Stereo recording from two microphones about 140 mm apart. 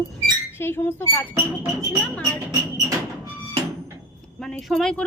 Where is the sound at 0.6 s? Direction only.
15° left (ahead or behind).